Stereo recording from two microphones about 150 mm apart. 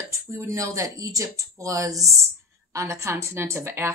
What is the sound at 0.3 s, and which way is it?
A woman's voice, 20° right (ahead or behind).